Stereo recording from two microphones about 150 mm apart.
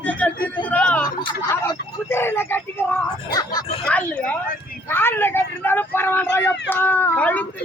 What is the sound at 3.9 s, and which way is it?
Speech, 10° left (ahead or behind).